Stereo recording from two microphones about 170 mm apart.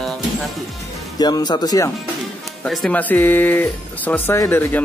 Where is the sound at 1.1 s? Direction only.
25° left (ahead or behind).